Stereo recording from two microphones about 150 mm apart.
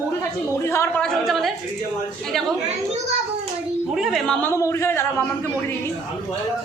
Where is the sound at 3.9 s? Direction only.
Centre (ahead or behind).